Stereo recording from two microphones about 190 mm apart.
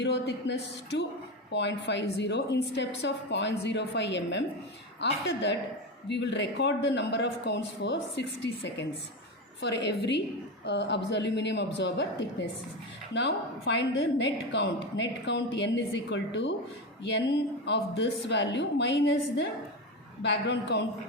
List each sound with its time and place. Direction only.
0.0 s a woman's voice: 65° left (ahead or behind)